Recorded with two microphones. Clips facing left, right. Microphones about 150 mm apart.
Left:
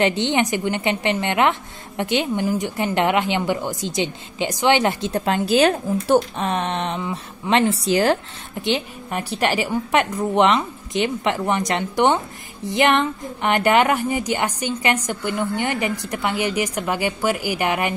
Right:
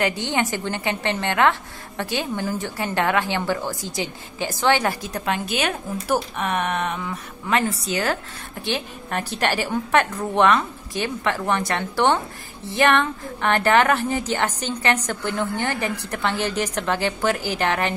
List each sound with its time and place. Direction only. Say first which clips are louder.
0.0 s a woman's voice: left 4 dB; 20° left (ahead or behind)
8.6 s a woman's voice: left 4 dB; 20° left (ahead or behind)